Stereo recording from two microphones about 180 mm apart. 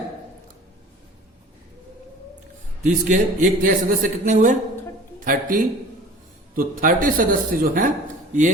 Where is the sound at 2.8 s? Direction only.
45° right (ahead or behind).